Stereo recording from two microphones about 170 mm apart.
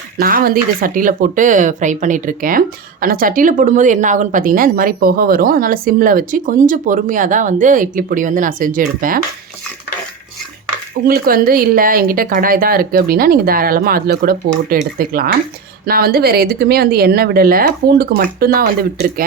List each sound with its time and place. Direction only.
0.2 s speech: 60° right (ahead or behind)
11.0 s speech: 55° right (ahead or behind)